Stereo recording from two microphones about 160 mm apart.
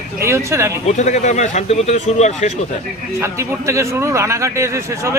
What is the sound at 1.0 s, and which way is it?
Speech, 50° left (ahead or behind).